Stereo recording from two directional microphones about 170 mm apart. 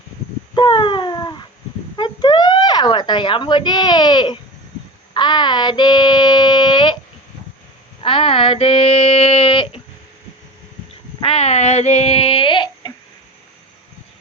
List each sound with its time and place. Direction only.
0.5 s a sound: 30° left (ahead or behind)
5.1 s child singing: 25° left (ahead or behind)
8.0 s child singing: 30° left (ahead or behind)
11.2 s child singing: 35° left (ahead or behind)